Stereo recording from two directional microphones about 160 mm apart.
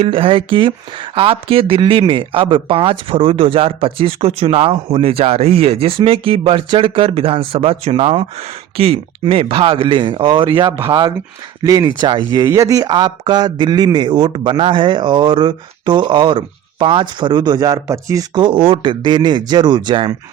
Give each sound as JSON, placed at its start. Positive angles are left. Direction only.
{"t": 0.0, "sound": "speech", "side_deg": -35}
{"t": 10.7, "sound": "speech", "side_deg": -15}